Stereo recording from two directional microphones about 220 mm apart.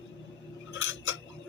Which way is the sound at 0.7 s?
65° left (ahead or behind).